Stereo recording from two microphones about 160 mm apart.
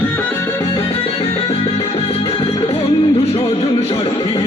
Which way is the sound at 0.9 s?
35° left (ahead or behind).